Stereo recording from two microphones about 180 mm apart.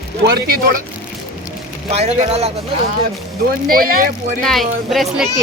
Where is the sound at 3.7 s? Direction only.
55° right (ahead or behind).